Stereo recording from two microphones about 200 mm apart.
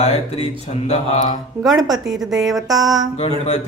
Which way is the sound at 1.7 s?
20° right (ahead or behind).